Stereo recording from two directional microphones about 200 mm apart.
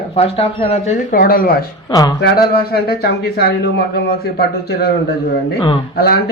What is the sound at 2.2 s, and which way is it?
A man's voice, 55° left (ahead or behind).